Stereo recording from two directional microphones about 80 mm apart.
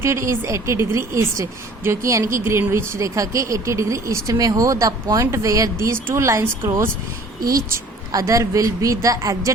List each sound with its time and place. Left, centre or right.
0.0 s a woman's voice: right
7.5 s a woman's voice: right